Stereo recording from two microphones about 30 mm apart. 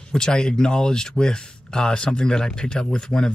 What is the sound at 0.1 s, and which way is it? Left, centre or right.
Speech, left.